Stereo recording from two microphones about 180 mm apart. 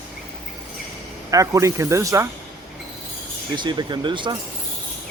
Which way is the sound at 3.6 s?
25° right (ahead or behind).